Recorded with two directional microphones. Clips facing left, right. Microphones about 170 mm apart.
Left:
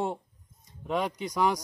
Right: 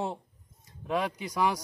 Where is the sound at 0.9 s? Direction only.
5° right (ahead or behind).